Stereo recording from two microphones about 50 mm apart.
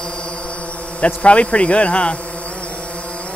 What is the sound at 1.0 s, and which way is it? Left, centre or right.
Speech, left.